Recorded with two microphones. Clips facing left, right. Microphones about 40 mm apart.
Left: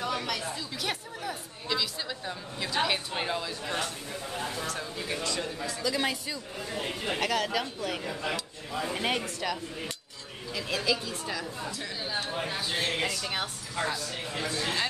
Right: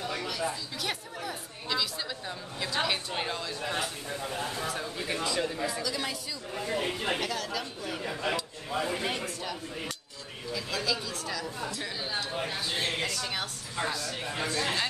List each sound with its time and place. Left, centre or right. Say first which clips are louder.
0.0 s chatter: left 3 dB; left
0.7 s a woman's voice: left 1 dB; centre
3.6 s a woman's voice: even; centre
5.8 s a woman's voice: left 4 dB; left
6.7 s speech: right 2 dB; centre
7.2 s speech: left 4 dB; left
8.0 s speech: right 1 dB; centre
8.9 s speech: left 2 dB; left
10.7 s speech: left 3 dB; centre
12.3 s a woman's voice: left 1 dB; centre
13.7 s a woman's voice: left 1 dB; centre